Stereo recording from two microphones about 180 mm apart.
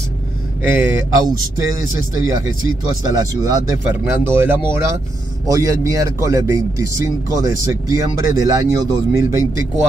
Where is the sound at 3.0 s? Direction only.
20° right (ahead or behind).